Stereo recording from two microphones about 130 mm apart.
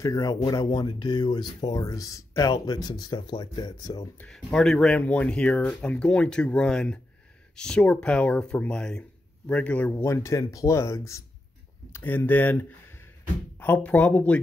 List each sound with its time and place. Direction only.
0.0 s speech: 30° left (ahead or behind)
4.2 s speech: 5° left (ahead or behind)